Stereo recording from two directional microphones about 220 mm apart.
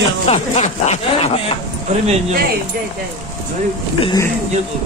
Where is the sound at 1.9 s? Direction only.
30° right (ahead or behind).